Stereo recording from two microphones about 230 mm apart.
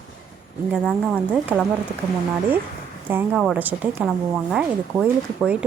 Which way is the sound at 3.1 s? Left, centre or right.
Centre.